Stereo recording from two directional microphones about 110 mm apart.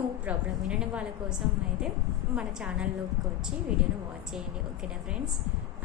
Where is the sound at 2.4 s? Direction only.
10° right (ahead or behind).